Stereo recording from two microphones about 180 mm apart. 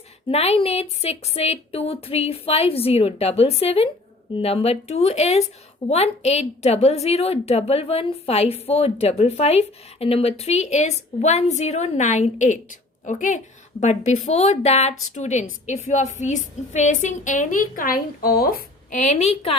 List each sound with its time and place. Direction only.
0.3 s a woman's voice: 35° left (ahead or behind)